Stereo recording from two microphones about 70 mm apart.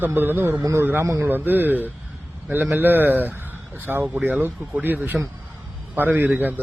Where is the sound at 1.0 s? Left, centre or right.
Right.